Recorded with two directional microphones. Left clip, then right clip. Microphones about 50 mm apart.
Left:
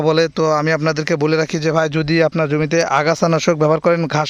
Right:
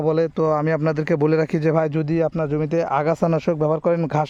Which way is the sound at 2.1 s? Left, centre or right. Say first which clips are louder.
Left 8 dB; left.